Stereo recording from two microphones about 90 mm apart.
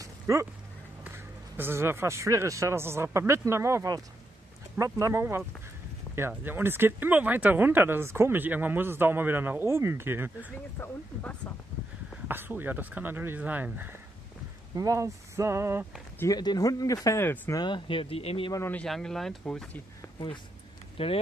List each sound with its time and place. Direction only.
0.0 s a sound: 35° right (ahead or behind)
1.1 s speech: 25° right (ahead or behind)
11.4 s speech: 15° left (ahead or behind)
12.3 s speech: 20° right (ahead or behind)
14.8 s speech: 35° right (ahead or behind)
16.3 s speech: 50° left (ahead or behind)
17.6 s speech: 60° left (ahead or behind); by 18.5 s 85° left
18.9 s speech: 5° left (ahead or behind)
21.0 s speech: 90° left